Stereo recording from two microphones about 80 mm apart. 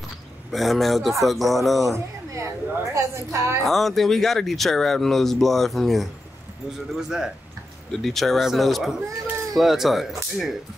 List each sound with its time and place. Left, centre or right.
0.5 s speech: centre
2.3 s a woman's voice: right
3.6 s speech: centre